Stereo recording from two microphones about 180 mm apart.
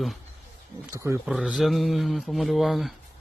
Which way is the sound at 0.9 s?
15° right (ahead or behind).